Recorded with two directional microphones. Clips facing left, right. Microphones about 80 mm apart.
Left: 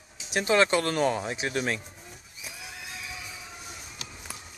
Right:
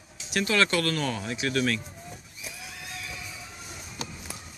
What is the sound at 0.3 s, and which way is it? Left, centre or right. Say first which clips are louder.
Speech: left 2 dB; left.